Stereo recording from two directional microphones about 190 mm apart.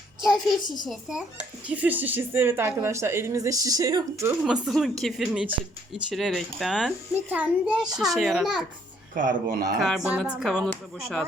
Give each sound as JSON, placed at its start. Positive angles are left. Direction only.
{"t": 0.2, "sound": "a child's voice", "side_deg": 0}
{"t": 4.4, "sound": "a child's voice", "side_deg": -5}
{"t": 9.1, "sound": "speech", "side_deg": -45}
{"t": 9.8, "sound": "a child's voice", "side_deg": -5}